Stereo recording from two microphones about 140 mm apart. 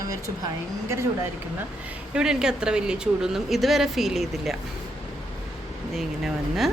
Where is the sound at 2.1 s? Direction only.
5° right (ahead or behind).